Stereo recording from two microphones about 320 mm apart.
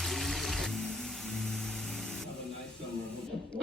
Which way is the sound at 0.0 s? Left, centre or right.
Centre.